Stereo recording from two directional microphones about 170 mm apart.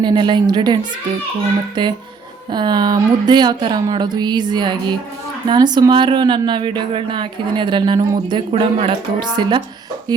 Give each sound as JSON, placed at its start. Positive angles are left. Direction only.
{"t": 0.0, "sound": "speech", "side_deg": -25}